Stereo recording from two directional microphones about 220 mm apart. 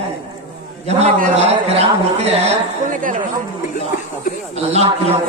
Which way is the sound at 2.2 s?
35° right (ahead or behind).